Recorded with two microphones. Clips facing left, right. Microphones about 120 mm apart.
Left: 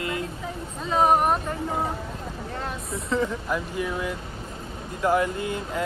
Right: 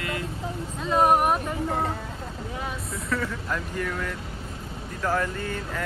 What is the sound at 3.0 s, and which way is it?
Speech, 25° left (ahead or behind).